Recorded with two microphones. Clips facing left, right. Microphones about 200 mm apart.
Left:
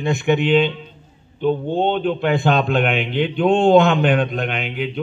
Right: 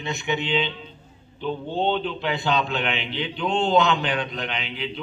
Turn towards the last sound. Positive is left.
turn(degrees=55)  # may be behind; listen again after turning